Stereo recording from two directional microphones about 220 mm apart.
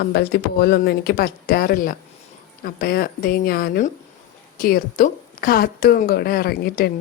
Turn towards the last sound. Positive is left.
turn(degrees=45)  # may be behind; listen again after turning